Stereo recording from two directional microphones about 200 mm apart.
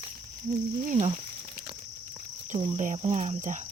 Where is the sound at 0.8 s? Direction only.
35° right (ahead or behind).